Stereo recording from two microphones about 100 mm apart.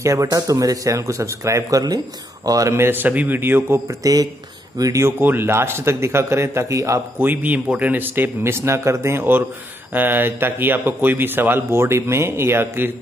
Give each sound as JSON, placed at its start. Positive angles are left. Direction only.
{"t": 0.0, "sound": "a man's voice", "side_deg": -30}
{"t": 4.0, "sound": "a man's voice", "side_deg": -35}
{"t": 7.2, "sound": "speech", "side_deg": -20}